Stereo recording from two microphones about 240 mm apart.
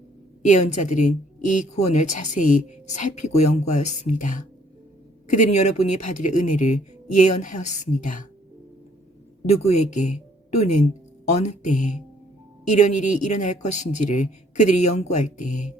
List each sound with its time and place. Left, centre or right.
0.4 s a woman's voice: left
9.5 s a woman's voice: left